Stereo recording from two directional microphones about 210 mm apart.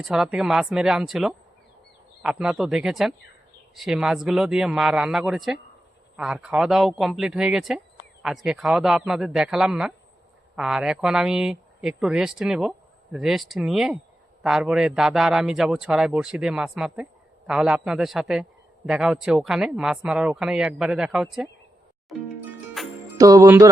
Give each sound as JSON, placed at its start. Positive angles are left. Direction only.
{"t": 0.0, "sound": "a man's voice", "side_deg": 0}
{"t": 22.8, "sound": "music", "side_deg": 0}
{"t": 23.1, "sound": "music", "side_deg": -15}